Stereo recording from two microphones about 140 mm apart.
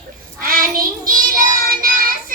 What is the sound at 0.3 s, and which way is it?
Child singing, 90° right.